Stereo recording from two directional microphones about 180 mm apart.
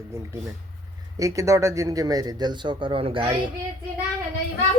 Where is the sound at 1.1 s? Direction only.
20° right (ahead or behind).